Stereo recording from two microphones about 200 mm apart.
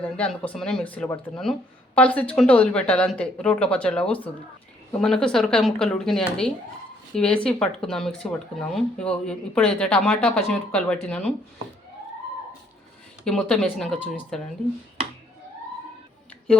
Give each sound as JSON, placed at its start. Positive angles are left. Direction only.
{"t": 0.0, "sound": "speech", "side_deg": 5}
{"t": 13.2, "sound": "speech", "side_deg": 5}